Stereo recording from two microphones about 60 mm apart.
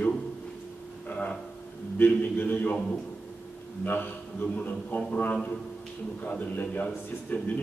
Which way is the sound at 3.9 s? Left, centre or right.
Left.